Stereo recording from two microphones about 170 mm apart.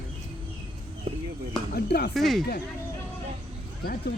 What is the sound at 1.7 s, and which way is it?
Speech, 65° left (ahead or behind).